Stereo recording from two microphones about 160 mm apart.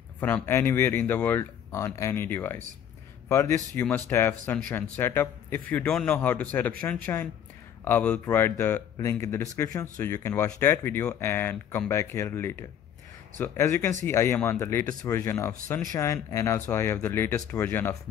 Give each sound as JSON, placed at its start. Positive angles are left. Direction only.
{"t": 0.2, "sound": "a man's voice", "side_deg": 15}